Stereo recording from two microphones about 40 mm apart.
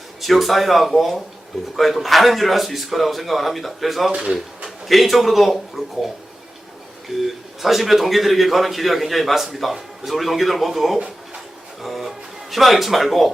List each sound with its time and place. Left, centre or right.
0.2 s a man's voice: centre
4.1 s speech: centre
4.9 s a man's voice: centre
7.1 s a man's voice: centre